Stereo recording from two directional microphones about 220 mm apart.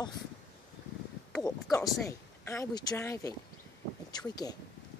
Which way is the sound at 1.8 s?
10° left (ahead or behind).